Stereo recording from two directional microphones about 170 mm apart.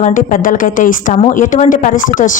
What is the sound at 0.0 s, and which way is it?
Speech, 50° left (ahead or behind).